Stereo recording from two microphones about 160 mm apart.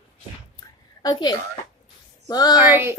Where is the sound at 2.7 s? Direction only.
15° right (ahead or behind).